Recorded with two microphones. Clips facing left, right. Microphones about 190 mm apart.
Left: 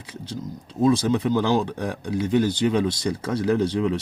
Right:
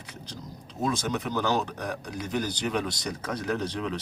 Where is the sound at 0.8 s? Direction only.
30° left (ahead or behind).